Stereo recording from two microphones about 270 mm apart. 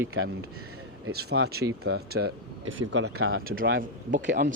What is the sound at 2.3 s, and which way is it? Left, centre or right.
Speech, right.